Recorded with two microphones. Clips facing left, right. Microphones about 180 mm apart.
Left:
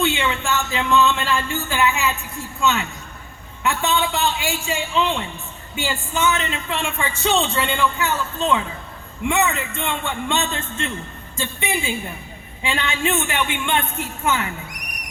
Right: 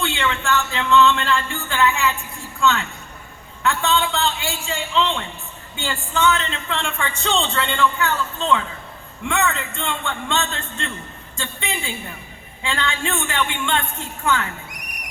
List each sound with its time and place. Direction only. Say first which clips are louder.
0.0 s speech: left 2 dB; 15° left (ahead or behind)